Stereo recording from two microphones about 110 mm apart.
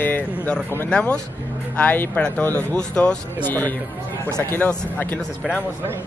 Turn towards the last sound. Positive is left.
turn(degrees=15)  # may be behind; listen again after turning